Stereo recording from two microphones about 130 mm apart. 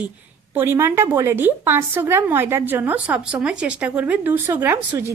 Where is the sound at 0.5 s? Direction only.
20° right (ahead or behind).